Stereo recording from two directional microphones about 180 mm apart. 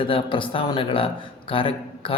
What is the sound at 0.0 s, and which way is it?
Speech, 30° left (ahead or behind).